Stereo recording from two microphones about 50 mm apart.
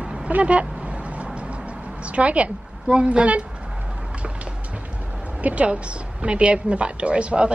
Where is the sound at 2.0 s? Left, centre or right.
Right.